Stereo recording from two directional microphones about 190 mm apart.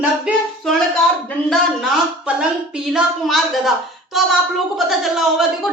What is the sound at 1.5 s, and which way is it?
A woman's voice, centre (ahead or behind).